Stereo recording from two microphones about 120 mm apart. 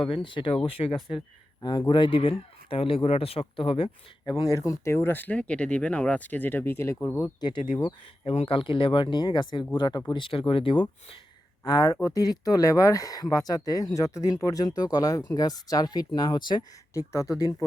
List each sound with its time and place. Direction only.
0.0 s speech: 45° left (ahead or behind)
4.3 s speech: 30° left (ahead or behind)
8.2 s speech: 55° left (ahead or behind)
11.6 s speech: 30° left (ahead or behind)
16.9 s speech: 25° left (ahead or behind)